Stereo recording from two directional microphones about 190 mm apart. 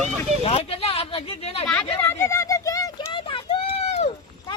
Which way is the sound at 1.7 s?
10° left (ahead or behind).